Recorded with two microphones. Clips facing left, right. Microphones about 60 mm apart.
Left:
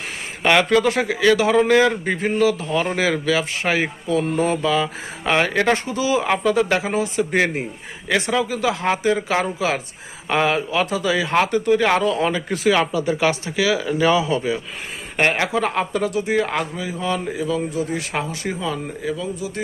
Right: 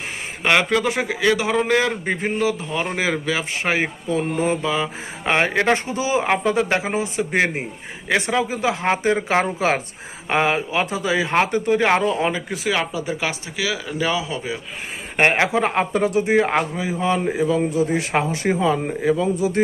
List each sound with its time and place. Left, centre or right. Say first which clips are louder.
0.4 s a man's voice: left 2 dB; centre; by 9.8 s right
10.2 s speech: even; right; by 14.4 s centre
15.2 s speech: right 2 dB; right